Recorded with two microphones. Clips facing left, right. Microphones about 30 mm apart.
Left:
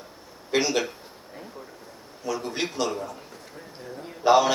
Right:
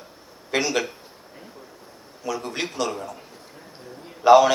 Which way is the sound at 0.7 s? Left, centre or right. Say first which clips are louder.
Right 1 dB; centre.